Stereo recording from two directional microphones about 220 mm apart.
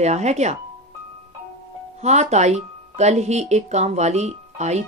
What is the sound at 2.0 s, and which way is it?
Speech, 30° right (ahead or behind).